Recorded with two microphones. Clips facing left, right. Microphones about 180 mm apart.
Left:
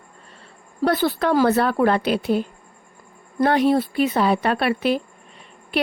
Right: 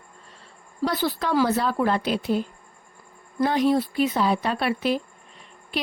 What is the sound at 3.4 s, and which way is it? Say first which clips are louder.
Speech: left 3 dB; 60° left (ahead or behind).